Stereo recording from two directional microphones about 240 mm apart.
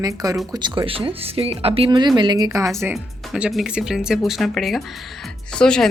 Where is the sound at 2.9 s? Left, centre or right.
Centre.